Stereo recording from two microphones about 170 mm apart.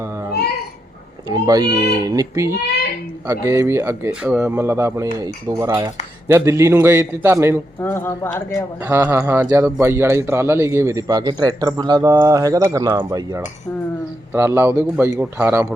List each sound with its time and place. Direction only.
0.0 s babbling: 15° right (ahead or behind)
1.3 s a man's voice: 25° right (ahead or behind)
7.8 s speech: 15° left (ahead or behind)
8.8 s a man's voice: 10° right (ahead or behind)